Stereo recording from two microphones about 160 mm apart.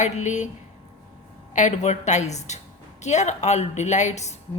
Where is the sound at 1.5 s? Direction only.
50° left (ahead or behind).